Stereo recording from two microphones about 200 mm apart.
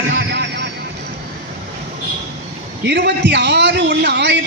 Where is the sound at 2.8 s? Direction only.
60° right (ahead or behind).